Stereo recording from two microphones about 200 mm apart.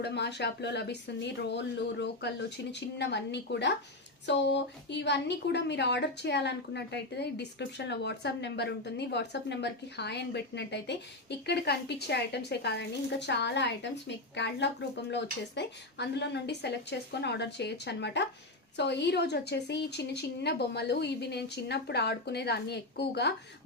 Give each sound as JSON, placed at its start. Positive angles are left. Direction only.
{"t": 0.0, "sound": "a woman's voice", "side_deg": 60}